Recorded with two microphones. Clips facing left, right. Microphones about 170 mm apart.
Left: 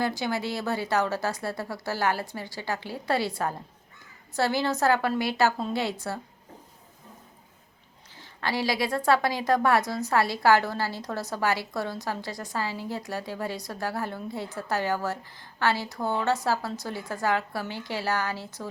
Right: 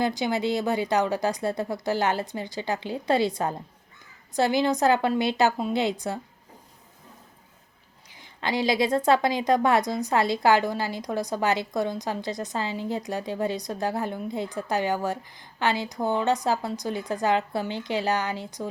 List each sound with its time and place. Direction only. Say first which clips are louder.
0.0 s a woman's voice: right 3 dB; 20° right (ahead or behind)
8.4 s a woman's voice: right 3 dB; 20° right (ahead or behind)